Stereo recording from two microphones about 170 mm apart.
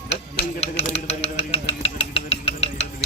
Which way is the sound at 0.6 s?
40° left (ahead or behind).